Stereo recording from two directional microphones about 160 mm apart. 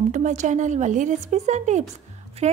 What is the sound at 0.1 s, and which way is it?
A woman's voice, 50° right (ahead or behind).